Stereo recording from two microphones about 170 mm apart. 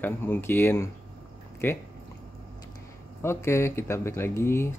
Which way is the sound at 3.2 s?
15° left (ahead or behind).